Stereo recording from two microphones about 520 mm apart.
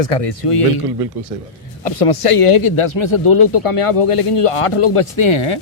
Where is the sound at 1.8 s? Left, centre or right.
Left.